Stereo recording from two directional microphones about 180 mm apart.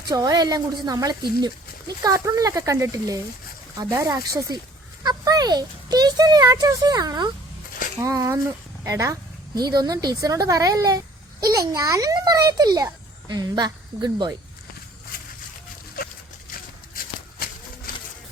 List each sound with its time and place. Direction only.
0.1 s speech: 20° right (ahead or behind)
15.1 s a sound: 55° left (ahead or behind)
16.9 s walk: 55° left (ahead or behind)